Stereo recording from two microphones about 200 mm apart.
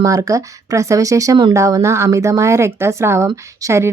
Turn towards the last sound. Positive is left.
turn(degrees=-15)  # may be behind; listen again after turning